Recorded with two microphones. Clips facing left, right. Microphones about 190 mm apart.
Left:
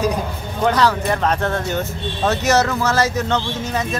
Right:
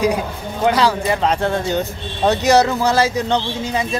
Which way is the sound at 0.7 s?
10° right (ahead or behind).